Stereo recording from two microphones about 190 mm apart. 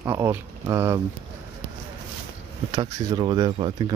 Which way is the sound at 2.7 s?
25° right (ahead or behind).